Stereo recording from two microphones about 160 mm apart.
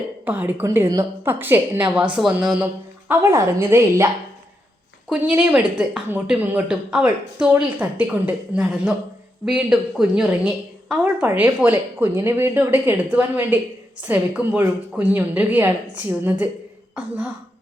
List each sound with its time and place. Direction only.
0.3 s a woman's voice: 10° right (ahead or behind)